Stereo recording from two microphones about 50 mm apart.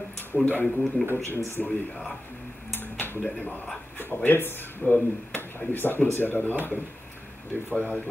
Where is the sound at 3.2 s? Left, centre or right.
Left.